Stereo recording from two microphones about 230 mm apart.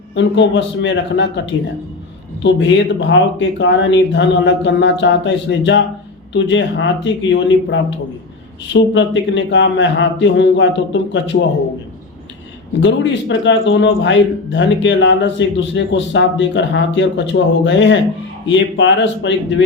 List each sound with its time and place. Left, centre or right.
0.1 s a man's voice: left
2.4 s a man's voice: left
12.8 s a man's voice: left